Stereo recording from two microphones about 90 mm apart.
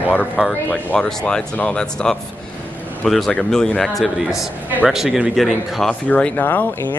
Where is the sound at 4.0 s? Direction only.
5° right (ahead or behind).